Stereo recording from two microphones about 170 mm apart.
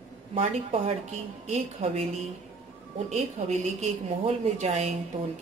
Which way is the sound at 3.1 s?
40° right (ahead or behind).